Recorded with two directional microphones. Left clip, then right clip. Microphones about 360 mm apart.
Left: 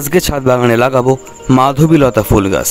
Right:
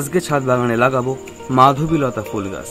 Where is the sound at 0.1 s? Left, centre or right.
Left.